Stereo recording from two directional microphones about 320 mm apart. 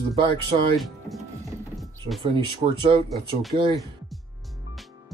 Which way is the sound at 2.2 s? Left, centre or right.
Centre.